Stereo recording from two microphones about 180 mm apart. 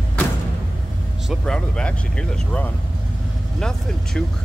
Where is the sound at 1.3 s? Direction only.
5° left (ahead or behind).